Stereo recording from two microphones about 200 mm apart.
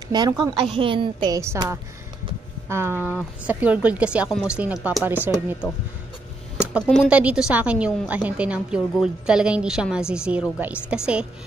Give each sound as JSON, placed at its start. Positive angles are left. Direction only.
{"t": 0.1, "sound": "a woman's voice", "side_deg": -20}
{"t": 6.6, "sound": "a woman's voice", "side_deg": -5}